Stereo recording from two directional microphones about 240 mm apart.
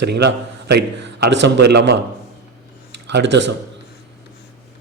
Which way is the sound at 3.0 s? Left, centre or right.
Right.